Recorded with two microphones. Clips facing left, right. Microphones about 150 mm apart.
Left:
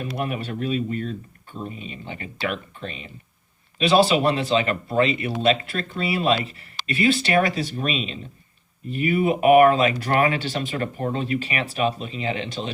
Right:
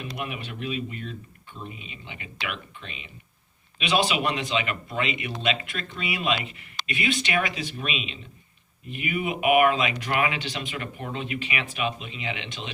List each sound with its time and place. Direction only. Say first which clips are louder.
0.0 s speech: left 6 dB; 40° left (ahead or behind)